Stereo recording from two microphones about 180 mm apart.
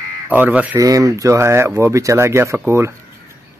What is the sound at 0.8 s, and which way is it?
Speech, 20° right (ahead or behind).